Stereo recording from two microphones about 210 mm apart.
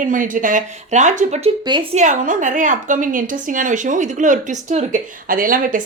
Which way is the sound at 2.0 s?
35° right (ahead or behind).